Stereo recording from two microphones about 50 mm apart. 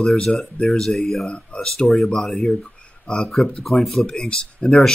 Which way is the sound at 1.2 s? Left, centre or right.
Left.